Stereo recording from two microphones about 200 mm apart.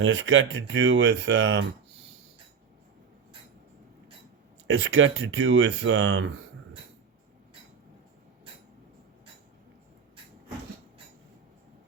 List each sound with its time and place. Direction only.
0.0 s speech: 70° right (ahead or behind)
4.6 s speech: 75° right (ahead or behind)